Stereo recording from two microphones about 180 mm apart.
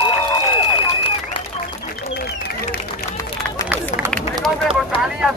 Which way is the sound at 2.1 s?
60° left (ahead or behind).